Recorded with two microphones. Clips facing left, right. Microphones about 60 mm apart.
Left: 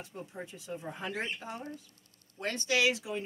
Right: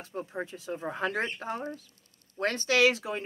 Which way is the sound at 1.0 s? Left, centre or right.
Right.